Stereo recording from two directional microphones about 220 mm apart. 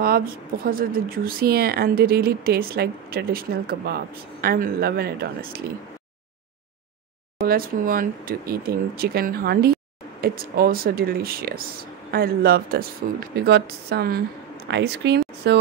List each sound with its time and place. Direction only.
0.7 s speech: 40° right (ahead or behind)
7.4 s speech: 40° right (ahead or behind)